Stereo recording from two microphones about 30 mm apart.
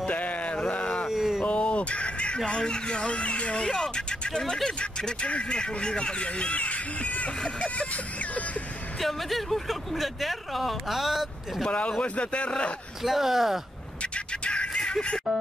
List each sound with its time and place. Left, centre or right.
0.1 s a sound: left
1.0 s a sound: centre
1.5 s speech: left
3.6 s speech: centre
3.9 s speech: left
9.0 s speech: centre
10.9 s speech: centre
12.0 s speech: left
13.0 s speech: centre
14.1 s music: left